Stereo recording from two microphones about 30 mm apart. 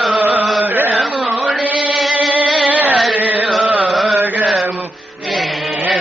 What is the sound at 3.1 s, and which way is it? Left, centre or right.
Chant, right.